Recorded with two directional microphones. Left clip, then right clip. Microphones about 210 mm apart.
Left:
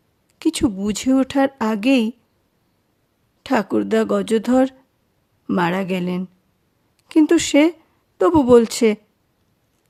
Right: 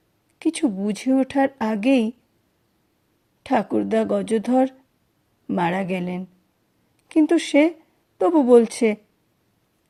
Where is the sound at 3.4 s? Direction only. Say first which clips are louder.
Left 2 dB; 20° left (ahead or behind).